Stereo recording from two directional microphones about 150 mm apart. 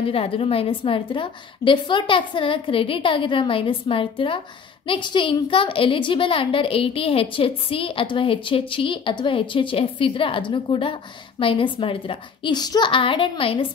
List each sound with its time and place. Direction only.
0.0 s a woman's voice: 40° left (ahead or behind)